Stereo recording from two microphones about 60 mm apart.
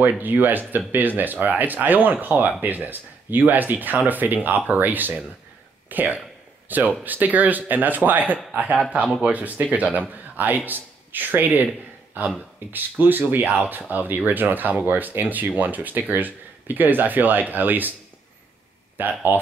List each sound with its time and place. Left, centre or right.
0.2 s speech: right
13.0 s speech: right
18.9 s speech: right